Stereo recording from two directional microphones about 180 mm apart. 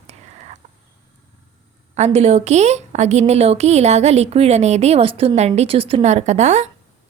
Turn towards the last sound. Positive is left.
turn(degrees=-40)  # may be behind; listen again after turning